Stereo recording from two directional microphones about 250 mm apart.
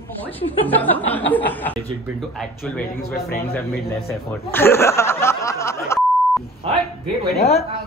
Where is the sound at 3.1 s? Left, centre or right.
Left.